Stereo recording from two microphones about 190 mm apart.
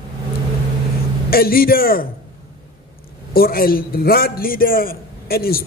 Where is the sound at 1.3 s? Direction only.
50° left (ahead or behind).